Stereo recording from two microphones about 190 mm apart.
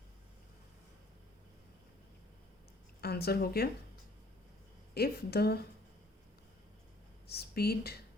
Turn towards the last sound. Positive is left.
turn(degrees=55)  # may be behind; listen again after turning